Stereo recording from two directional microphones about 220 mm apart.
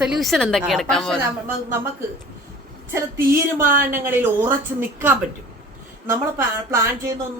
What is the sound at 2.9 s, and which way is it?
A woman's voice, 15° right (ahead or behind).